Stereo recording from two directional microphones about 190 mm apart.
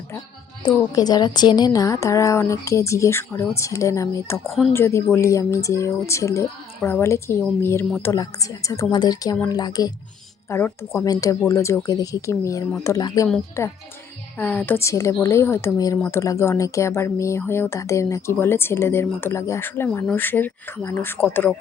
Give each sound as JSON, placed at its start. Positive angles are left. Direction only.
{"t": 0.9, "sound": "speech", "side_deg": 20}
{"t": 8.1, "sound": "a woman's voice", "side_deg": 20}